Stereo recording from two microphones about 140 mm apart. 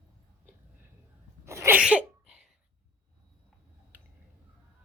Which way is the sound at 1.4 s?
20° right (ahead or behind).